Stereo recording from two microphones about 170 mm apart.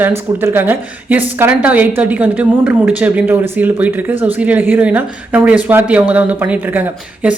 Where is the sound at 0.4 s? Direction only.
10° right (ahead or behind).